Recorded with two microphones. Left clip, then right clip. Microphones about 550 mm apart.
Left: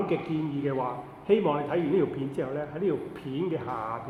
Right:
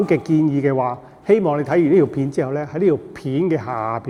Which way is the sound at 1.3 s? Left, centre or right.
Right.